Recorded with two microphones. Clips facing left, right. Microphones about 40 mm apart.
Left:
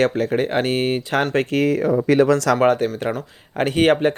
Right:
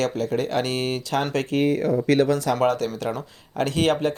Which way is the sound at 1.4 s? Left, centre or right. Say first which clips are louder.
Left 5 dB; left.